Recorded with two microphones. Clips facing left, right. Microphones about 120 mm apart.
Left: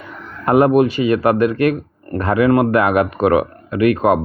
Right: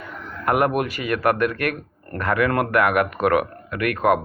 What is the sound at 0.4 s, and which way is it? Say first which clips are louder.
Speech: left 8 dB; 25° left (ahead or behind).